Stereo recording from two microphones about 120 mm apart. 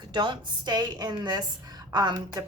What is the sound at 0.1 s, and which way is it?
A woman's voice, 40° right (ahead or behind).